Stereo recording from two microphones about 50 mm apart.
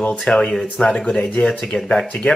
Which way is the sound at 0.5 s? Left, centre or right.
Centre.